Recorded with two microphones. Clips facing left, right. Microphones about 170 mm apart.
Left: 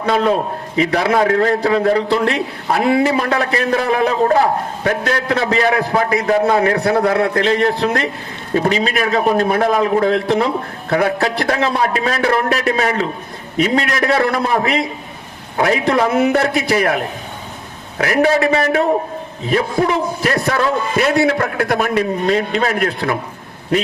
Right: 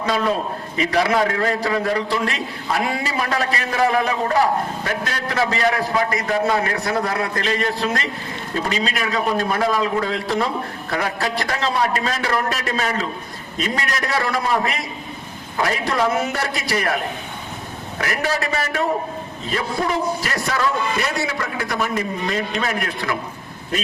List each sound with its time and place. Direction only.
0.0 s a man's voice: 60° left (ahead or behind)